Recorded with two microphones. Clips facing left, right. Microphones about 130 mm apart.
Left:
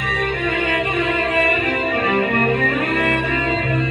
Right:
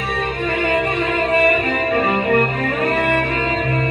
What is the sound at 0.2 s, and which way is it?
Music, 30° right (ahead or behind).